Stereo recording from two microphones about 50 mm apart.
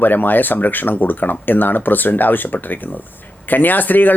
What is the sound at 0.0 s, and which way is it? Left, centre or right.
Speech, left.